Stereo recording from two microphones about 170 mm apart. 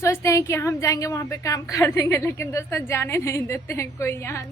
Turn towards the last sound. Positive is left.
turn(degrees=15)  # may be behind; listen again after turning